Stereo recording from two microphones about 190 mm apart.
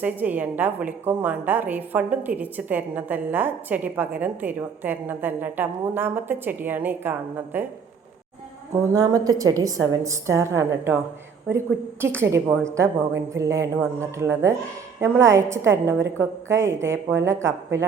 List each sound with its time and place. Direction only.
0.0 s a woman's voice: 10° right (ahead or behind)
8.7 s a woman's voice: 15° right (ahead or behind)